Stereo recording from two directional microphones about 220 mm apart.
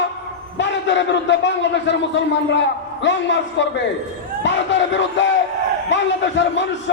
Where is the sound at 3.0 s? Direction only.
55° left (ahead or behind).